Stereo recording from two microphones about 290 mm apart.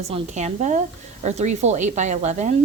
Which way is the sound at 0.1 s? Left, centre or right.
Right.